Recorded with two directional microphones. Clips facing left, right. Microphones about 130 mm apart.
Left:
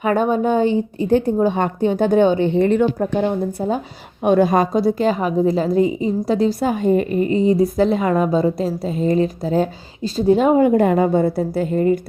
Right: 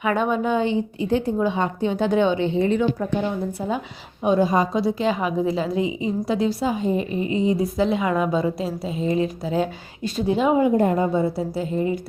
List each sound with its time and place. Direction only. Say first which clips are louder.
0.0 s a woman's voice: left 4 dB; 40° left (ahead or behind)
4.2 s a woman's voice: left 4 dB; 65° left (ahead or behind)
4.7 s a woman's voice: left 4 dB; 45° left (ahead or behind)
10.8 s a woman's voice: left 4 dB; 80° left; by 11.9 s 55° left (ahead or behind)